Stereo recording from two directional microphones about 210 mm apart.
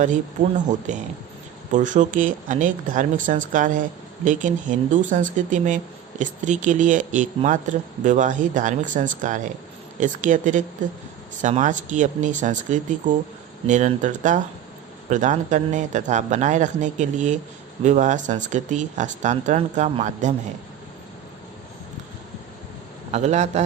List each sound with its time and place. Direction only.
0.9 s speech: 35° right (ahead or behind)
23.1 s speech: 35° right (ahead or behind)